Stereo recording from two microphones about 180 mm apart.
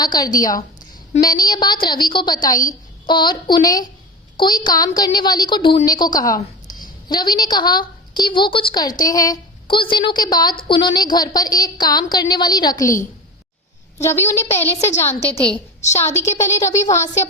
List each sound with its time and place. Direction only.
0.0 s a woman's voice: 20° left (ahead or behind)
16.0 s a woman's voice: 15° left (ahead or behind)